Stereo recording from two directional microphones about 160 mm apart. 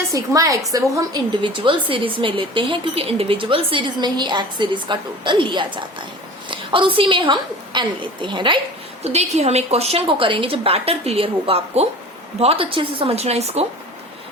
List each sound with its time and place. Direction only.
0.1 s a woman's voice: 20° right (ahead or behind)
9.0 s a woman's voice: 40° right (ahead or behind)